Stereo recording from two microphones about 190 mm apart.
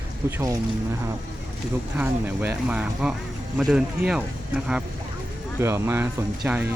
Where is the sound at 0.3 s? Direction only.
10° right (ahead or behind).